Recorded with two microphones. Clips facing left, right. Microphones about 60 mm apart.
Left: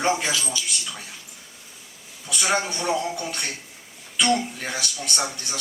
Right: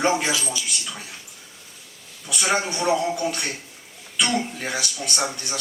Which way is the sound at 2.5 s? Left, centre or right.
Centre.